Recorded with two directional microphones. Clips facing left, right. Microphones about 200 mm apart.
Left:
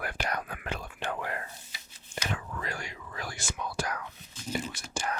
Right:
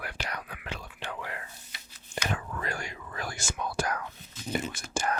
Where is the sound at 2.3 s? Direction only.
50° right (ahead or behind).